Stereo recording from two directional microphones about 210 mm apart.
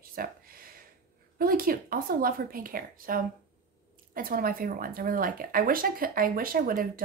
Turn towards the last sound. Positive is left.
turn(degrees=-45)  # may be behind; listen again after turning